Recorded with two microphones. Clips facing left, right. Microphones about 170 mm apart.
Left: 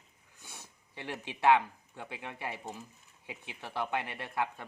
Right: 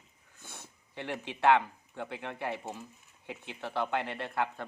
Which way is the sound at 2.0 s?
15° left (ahead or behind).